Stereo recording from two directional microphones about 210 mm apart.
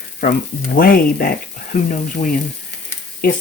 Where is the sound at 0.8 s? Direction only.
45° left (ahead or behind).